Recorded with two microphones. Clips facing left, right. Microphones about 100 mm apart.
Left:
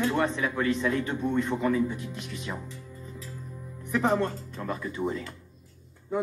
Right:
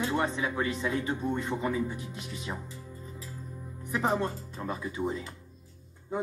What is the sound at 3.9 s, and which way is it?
A man's voice, 15° right (ahead or behind).